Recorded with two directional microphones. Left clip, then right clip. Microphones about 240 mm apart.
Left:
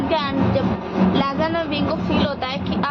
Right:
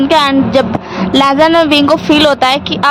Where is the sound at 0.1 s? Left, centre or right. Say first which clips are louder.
Right 11 dB; right.